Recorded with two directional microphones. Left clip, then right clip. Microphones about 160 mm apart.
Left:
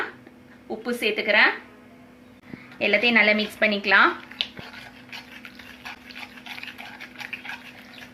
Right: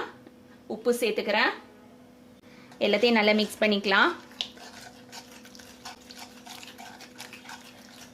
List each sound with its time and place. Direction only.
0.7 s a woman's voice: 75° right (ahead or behind)
2.7 s a woman's voice: 70° right (ahead or behind)